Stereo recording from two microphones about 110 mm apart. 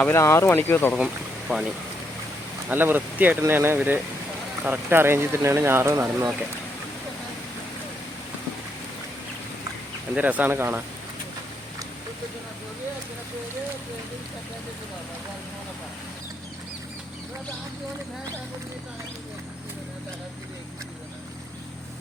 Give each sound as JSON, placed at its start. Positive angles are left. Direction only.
{"t": 0.0, "sound": "speech", "side_deg": 25}
{"t": 0.9, "sound": "speech", "side_deg": -5}
{"t": 2.6, "sound": "speech", "side_deg": -15}
{"t": 10.2, "sound": "speech", "side_deg": -15}